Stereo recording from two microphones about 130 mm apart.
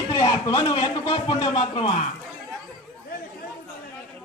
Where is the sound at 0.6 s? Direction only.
40° left (ahead or behind).